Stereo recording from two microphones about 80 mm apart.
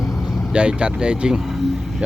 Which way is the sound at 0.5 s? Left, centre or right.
Centre.